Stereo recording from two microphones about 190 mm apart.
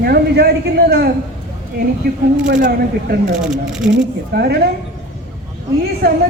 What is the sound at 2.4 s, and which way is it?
Speech, 45° right (ahead or behind).